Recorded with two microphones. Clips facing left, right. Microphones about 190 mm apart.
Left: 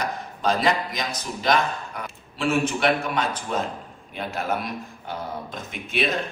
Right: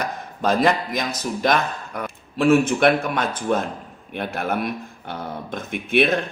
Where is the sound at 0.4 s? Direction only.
50° right (ahead or behind).